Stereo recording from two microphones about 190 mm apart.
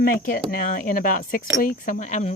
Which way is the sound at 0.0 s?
50° left (ahead or behind).